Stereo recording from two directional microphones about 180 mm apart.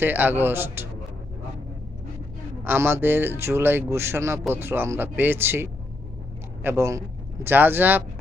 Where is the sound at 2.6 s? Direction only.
10° right (ahead or behind).